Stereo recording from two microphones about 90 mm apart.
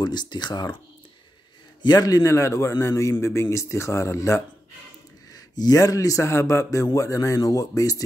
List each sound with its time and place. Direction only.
0.0 s speech: 55° left (ahead or behind)
1.8 s a man's voice: 50° left (ahead or behind); by 4.4 s 35° left (ahead or behind)
5.3 s a man's voice: 50° left (ahead or behind)